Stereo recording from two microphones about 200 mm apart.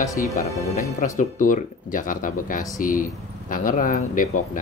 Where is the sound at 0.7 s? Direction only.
35° left (ahead or behind).